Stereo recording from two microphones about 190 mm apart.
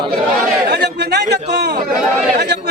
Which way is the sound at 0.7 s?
60° right (ahead or behind).